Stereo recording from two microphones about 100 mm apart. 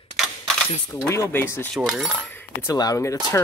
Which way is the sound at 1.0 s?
25° left (ahead or behind).